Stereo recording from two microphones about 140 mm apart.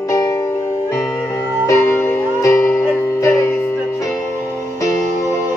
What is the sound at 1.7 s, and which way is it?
Music, 20° left (ahead or behind).